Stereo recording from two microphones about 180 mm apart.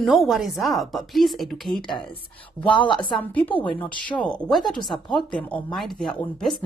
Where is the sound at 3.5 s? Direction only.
10° left (ahead or behind).